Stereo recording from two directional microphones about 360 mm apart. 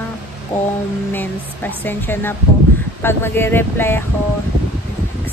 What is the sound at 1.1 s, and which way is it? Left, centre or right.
Speech, centre.